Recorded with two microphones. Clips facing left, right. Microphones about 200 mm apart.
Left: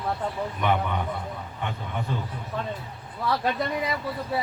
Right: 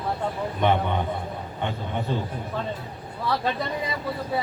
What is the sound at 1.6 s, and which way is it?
Speech, 30° right (ahead or behind).